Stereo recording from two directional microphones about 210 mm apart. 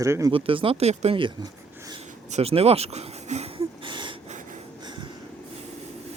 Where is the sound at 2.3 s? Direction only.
30° right (ahead or behind).